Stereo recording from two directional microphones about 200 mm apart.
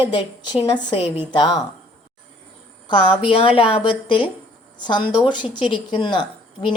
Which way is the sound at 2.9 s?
25° left (ahead or behind).